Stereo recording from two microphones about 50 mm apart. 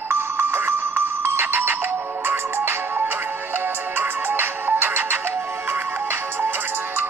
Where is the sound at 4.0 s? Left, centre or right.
Right.